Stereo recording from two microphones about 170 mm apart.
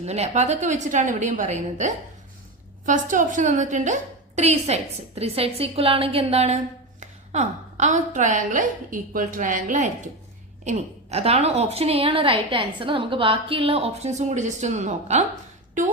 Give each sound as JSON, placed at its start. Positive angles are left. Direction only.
{"t": 0.0, "sound": "a woman's voice", "side_deg": -40}